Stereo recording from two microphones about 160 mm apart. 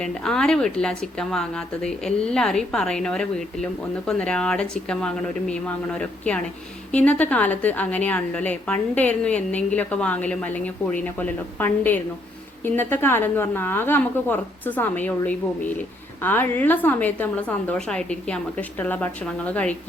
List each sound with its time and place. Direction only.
0.0 s a woman's voice: 5° left (ahead or behind)